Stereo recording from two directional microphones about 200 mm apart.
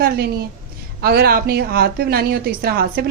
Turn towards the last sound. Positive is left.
turn(degrees=-50)  # may be behind; listen again after turning